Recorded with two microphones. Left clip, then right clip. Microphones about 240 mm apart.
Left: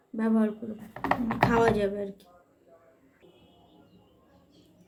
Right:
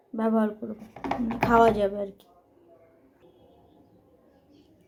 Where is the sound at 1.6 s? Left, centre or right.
Centre.